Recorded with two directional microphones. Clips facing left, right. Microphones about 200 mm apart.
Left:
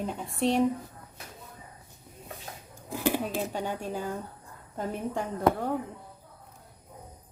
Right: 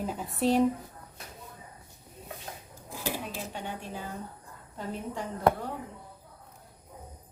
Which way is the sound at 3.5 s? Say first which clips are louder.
Left 6 dB; 40° left (ahead or behind).